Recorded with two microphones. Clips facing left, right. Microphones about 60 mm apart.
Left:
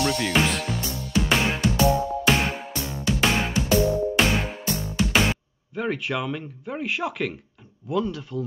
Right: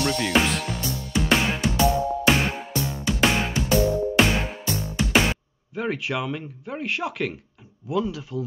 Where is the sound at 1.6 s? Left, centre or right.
Right.